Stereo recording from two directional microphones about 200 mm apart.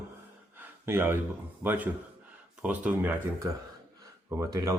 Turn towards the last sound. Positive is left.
turn(degrees=-15)  # may be behind; listen again after turning